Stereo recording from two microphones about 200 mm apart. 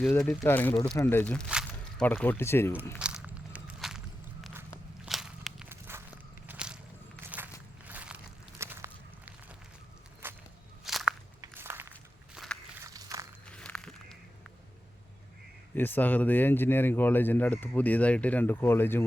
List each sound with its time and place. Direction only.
0.0 s speech: 5° left (ahead or behind)
1.5 s squish: 5° right (ahead or behind)
2.0 s speech: 10° left (ahead or behind)
3.0 s walk: 5° right (ahead or behind)
5.9 s walk: 10° right (ahead or behind)
7.9 s a sound: 5° right (ahead or behind)
10.2 s walk: 10° right (ahead or behind)
10.8 s walk: centre (ahead or behind)
11.3 s walk: 10° right (ahead or behind)
12.8 s a sound: 15° right (ahead or behind)
13.5 s walk: 5° left (ahead or behind)
15.7 s speech: 10° left (ahead or behind)